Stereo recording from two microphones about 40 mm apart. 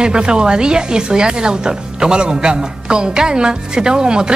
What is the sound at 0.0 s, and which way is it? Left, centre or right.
Music, right.